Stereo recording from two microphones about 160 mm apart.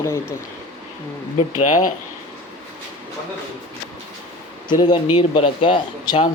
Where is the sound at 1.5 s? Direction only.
50° left (ahead or behind).